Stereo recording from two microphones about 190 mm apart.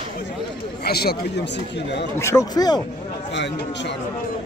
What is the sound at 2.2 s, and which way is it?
Speech, 15° left (ahead or behind).